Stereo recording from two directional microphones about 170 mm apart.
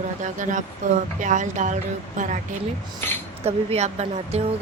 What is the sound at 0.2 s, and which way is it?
Speech, 45° right (ahead or behind).